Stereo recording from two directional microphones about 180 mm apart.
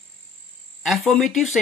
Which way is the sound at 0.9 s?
Centre (ahead or behind).